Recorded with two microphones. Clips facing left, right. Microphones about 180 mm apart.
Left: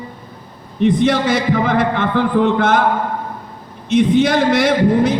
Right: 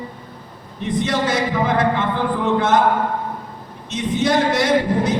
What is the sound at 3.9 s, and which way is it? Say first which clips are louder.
Speech: left 6 dB; 60° left (ahead or behind).